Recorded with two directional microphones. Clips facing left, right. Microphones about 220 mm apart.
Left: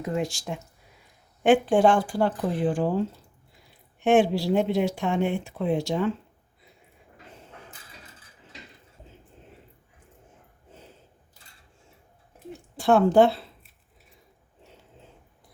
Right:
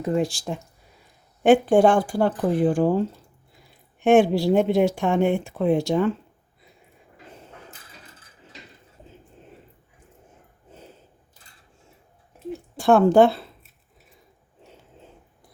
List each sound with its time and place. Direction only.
0.0 s speech: 35° right (ahead or behind)
1.5 s speech: 45° right (ahead or behind)
4.0 s speech: 45° right (ahead or behind)
12.8 s speech: 50° right (ahead or behind)